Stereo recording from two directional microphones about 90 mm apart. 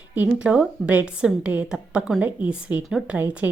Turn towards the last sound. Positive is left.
turn(degrees=-20)  # may be behind; listen again after turning